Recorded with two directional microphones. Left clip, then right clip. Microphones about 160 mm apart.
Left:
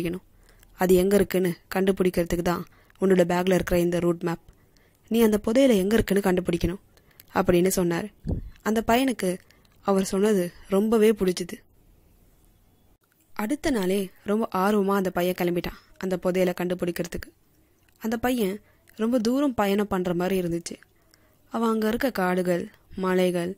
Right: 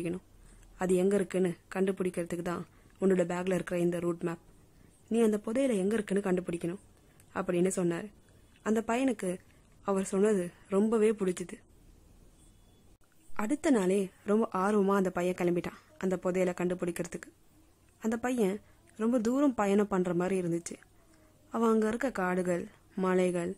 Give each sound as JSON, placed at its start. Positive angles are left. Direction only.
{"t": 0.7, "sound": "a woman's voice", "side_deg": 20}
{"t": 13.3, "sound": "a woman's voice", "side_deg": 10}